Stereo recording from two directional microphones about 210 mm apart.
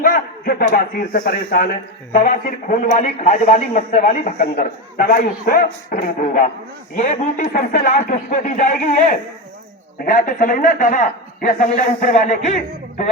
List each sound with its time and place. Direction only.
0.0 s a sound: 40° left (ahead or behind)
0.7 s a man's voice: 45° left (ahead or behind)
5.0 s a man's voice: 45° left (ahead or behind)
7.5 s speech: 45° left (ahead or behind)
7.9 s a man's voice: 35° left (ahead or behind)